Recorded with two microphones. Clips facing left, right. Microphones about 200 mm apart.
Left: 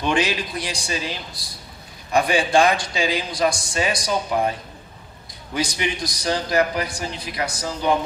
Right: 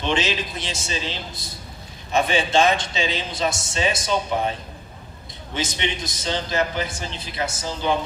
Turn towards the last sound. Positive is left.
turn(degrees=-25)  # may be behind; listen again after turning